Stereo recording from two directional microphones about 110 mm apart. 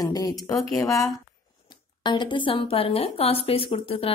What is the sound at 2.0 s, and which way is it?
A woman's voice, 45° left (ahead or behind).